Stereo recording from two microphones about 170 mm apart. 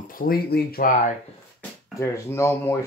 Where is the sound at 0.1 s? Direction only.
60° left (ahead or behind).